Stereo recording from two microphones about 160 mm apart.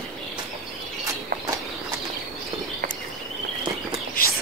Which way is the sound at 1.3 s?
70° right (ahead or behind).